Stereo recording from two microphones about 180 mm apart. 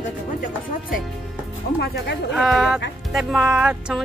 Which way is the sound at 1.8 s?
65° left (ahead or behind).